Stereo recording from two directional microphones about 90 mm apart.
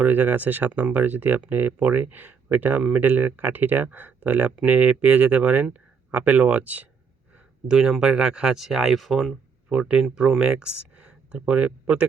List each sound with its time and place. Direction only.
0.0 s speech: 20° right (ahead or behind)